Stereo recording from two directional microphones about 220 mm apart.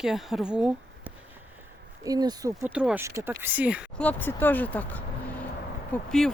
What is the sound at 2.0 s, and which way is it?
Speech, 15° right (ahead or behind).